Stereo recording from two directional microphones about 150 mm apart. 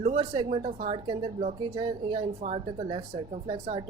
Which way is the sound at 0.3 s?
35° right (ahead or behind).